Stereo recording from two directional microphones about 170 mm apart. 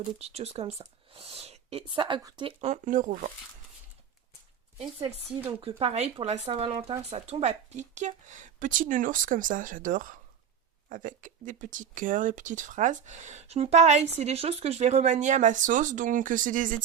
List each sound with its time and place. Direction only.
0.0 s speech: 40° right (ahead or behind)
2.6 s a woman's voice: 45° right (ahead or behind)
4.8 s a woman's voice: 35° right (ahead or behind); by 16.7 s 50° right (ahead or behind)